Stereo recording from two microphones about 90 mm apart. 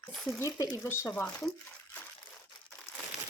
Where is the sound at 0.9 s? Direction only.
30° left (ahead or behind).